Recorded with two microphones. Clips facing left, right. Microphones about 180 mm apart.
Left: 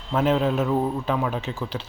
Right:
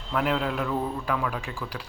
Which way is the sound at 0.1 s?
25° left (ahead or behind).